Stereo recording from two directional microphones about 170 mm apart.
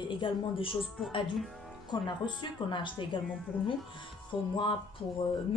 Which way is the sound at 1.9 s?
25° left (ahead or behind).